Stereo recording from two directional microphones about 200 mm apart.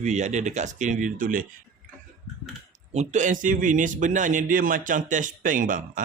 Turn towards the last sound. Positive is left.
turn(degrees=-40)  # may be behind; listen again after turning